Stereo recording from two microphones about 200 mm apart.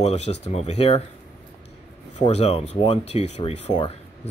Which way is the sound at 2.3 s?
30° left (ahead or behind).